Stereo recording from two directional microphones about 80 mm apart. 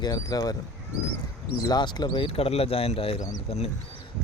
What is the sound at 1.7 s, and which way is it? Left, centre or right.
Speech, left.